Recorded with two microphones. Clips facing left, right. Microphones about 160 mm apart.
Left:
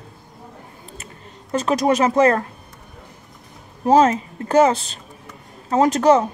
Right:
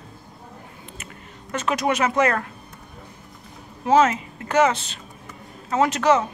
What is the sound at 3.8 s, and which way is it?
Speech, 35° left (ahead or behind).